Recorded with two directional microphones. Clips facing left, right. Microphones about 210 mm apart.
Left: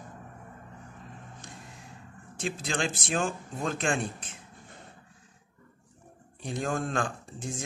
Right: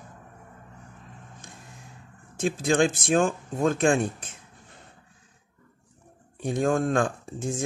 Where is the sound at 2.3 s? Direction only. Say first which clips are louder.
Right 9 dB; 50° right (ahead or behind).